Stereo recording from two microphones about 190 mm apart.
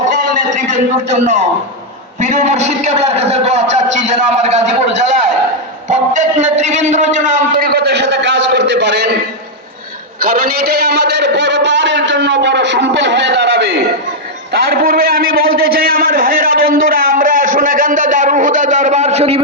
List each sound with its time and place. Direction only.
0.1 s a sound: 45° right (ahead or behind)
2.2 s a man's voice: 40° right (ahead or behind); by 9.1 s 65° right (ahead or behind)
10.2 s a man's voice: 50° right (ahead or behind); by 19.4 s 35° right (ahead or behind)